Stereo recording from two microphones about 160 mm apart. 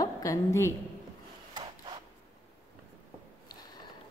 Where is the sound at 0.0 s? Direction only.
20° left (ahead or behind).